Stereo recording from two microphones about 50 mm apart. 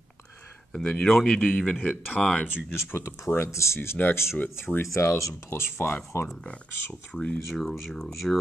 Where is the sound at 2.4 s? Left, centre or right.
Centre.